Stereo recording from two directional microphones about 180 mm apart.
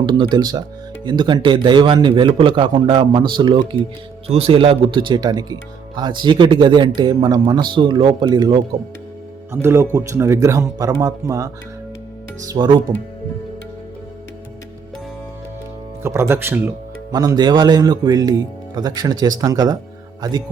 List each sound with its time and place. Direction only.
0.0 s a man's voice: 25° right (ahead or behind)
9.5 s a man's voice: 15° right (ahead or behind)
16.0 s a man's voice: 15° right (ahead or behind)